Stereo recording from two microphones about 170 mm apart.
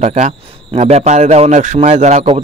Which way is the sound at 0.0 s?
45° right (ahead or behind).